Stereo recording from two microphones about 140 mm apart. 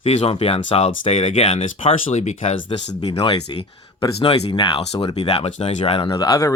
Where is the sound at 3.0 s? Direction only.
40° left (ahead or behind).